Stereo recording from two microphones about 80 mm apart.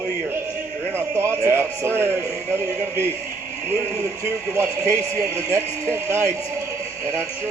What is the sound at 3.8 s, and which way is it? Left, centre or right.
Speech, right.